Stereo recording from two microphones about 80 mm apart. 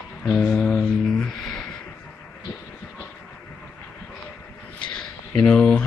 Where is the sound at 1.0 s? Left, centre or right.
Centre.